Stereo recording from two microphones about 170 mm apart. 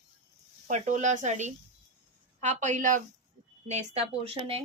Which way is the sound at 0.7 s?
45° right (ahead or behind).